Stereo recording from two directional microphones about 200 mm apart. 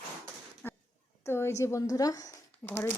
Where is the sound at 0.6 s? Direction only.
10° left (ahead or behind).